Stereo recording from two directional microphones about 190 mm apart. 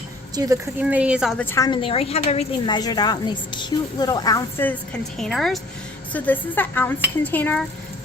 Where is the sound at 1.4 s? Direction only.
15° left (ahead or behind).